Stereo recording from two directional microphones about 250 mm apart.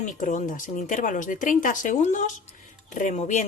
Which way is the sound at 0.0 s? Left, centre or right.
Left.